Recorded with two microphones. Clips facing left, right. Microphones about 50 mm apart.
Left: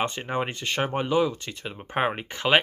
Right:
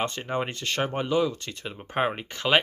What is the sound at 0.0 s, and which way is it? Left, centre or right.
Speech, centre.